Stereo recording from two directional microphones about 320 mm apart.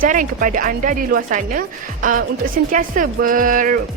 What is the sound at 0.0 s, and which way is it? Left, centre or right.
A woman's voice, right.